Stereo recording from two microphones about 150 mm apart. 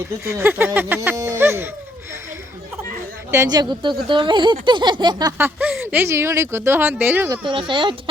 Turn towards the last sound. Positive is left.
turn(degrees=-35)  # may be behind; listen again after turning